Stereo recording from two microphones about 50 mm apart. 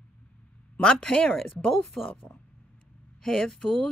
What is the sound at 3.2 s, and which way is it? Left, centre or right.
Speech, centre.